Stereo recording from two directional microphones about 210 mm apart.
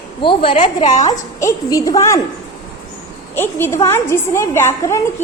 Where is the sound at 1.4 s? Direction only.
15° left (ahead or behind).